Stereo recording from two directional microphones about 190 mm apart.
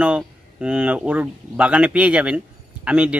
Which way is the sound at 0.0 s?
5° right (ahead or behind).